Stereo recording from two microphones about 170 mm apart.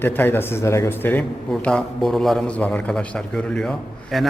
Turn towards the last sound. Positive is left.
turn(degrees=0)  # may be behind; listen again after turning